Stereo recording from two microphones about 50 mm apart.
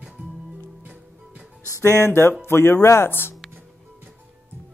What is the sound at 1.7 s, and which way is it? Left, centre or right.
Speech, left.